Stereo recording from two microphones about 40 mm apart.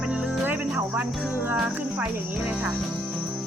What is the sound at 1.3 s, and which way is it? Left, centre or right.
Jingle bell, right.